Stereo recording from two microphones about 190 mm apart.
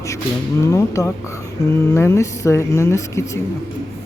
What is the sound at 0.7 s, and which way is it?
Speech, 15° left (ahead or behind).